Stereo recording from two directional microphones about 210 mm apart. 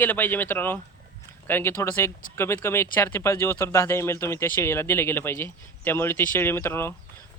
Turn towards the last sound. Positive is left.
turn(degrees=10)  # may be behind; listen again after turning